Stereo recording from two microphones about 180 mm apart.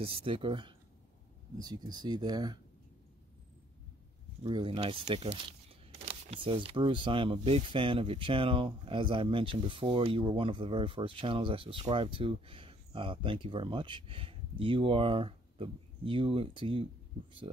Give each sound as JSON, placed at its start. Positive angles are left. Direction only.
{"t": 0.0, "sound": "speech", "side_deg": -30}
{"t": 4.4, "sound": "speech", "side_deg": -25}